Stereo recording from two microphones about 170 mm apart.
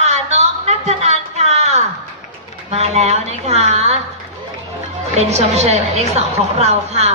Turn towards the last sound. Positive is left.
turn(degrees=-40)  # may be behind; listen again after turning